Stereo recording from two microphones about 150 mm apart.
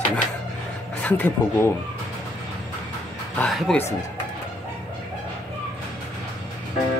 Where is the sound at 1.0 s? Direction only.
10° left (ahead or behind).